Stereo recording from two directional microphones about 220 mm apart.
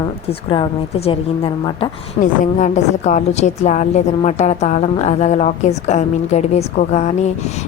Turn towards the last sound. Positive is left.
turn(degrees=30)  # may be behind; listen again after turning